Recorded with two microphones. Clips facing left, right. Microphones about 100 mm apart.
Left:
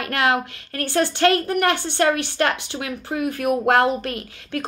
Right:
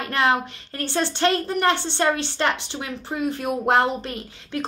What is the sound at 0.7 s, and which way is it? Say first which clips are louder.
A woman's voice: left 3 dB; 20° right (ahead or behind).